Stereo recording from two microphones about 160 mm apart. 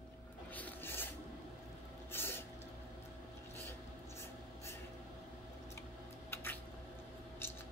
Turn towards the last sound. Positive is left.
turn(degrees=15)  # may be behind; listen again after turning